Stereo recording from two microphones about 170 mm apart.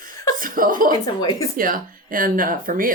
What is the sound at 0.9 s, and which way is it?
Speech, 20° left (ahead or behind).